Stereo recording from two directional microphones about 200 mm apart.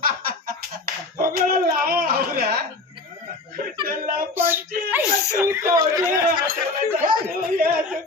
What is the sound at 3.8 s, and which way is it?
Speech, 45° right (ahead or behind).